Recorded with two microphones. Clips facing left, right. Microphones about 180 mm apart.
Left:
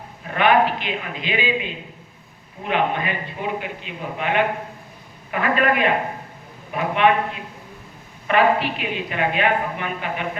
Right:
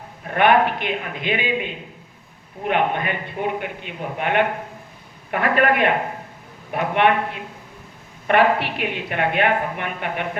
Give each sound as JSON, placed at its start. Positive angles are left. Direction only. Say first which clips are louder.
{"t": 0.3, "sound": "a woman's voice", "louder": "right 1 dB", "side_deg": -55}
{"t": 2.6, "sound": "a woman's voice", "louder": "right 1 dB", "side_deg": -55}
{"t": 7.0, "sound": "a woman's voice", "louder": "left 1 dB", "side_deg": -65}
{"t": 8.3, "sound": "a woman's voice", "louder": "right 1 dB", "side_deg": -65}